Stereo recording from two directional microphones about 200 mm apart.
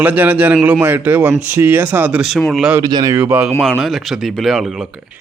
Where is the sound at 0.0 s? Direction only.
10° right (ahead or behind).